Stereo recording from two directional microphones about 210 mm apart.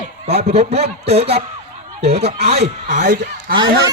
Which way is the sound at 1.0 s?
30° right (ahead or behind).